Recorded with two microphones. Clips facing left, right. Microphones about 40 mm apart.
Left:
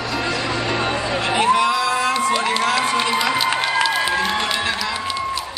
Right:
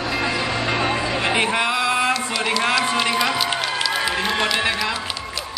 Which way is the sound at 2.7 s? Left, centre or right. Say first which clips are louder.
Left 1 dB; left.